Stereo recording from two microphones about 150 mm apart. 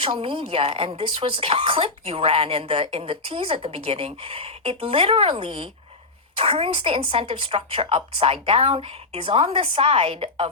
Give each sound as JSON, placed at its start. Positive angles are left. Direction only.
{"t": 0.0, "sound": "speech", "side_deg": -35}